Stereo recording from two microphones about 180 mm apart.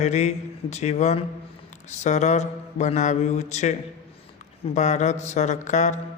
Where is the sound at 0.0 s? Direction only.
40° left (ahead or behind).